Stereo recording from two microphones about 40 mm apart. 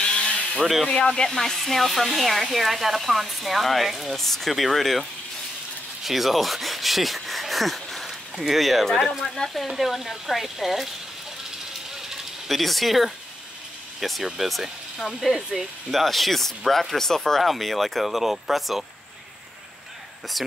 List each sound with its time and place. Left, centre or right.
0.0 s a sound: left
0.8 s speech: left
1.3 s speech: centre
6.0 s speech: centre
8.8 s speech: centre
9.5 s speech: centre
12.4 s speech: centre
20.4 s speech: centre